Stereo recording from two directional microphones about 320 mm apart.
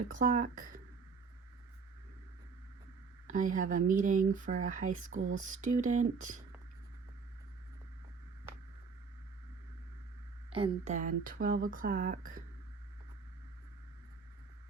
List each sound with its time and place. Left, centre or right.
0.1 s speech: right
3.2 s speech: right
10.5 s speech: centre